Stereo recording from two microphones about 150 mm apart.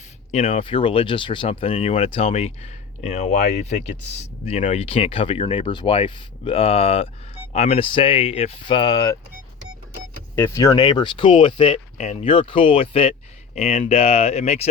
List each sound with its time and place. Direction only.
0.3 s speech: 45° left (ahead or behind); by 9.1 s 25° left (ahead or behind)
10.3 s speech: 15° left (ahead or behind); by 14.7 s 45° left (ahead or behind)